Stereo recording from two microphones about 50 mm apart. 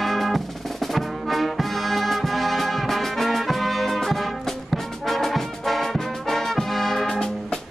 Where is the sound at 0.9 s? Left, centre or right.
Centre.